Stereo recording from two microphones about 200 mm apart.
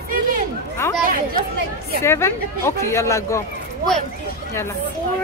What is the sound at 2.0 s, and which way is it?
Speech, 10° left (ahead or behind).